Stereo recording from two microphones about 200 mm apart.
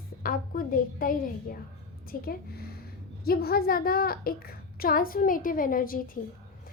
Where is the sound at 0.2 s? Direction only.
45° left (ahead or behind).